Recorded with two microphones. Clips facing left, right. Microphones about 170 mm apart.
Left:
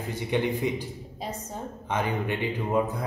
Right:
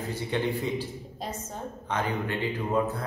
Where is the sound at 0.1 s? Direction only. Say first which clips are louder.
Left 3 dB; 15° left (ahead or behind).